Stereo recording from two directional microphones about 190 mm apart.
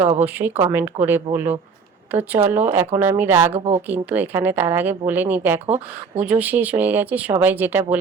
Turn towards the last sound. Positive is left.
turn(degrees=-10)  # may be behind; listen again after turning